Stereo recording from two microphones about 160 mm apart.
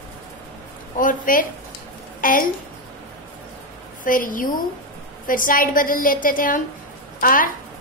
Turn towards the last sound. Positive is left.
turn(degrees=60)  # may be behind; listen again after turning